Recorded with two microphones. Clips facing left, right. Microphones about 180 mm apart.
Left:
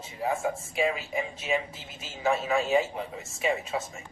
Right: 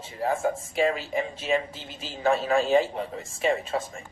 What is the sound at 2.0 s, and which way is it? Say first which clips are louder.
Speech: right 3 dB; 35° right (ahead or behind).